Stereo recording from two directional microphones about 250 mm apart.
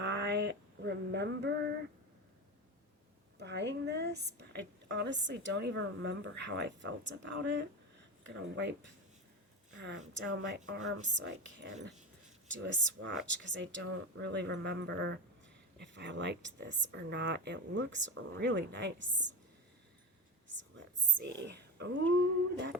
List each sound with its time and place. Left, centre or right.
0.0 s a sound: right
3.3 s speech: right
21.2 s speech: right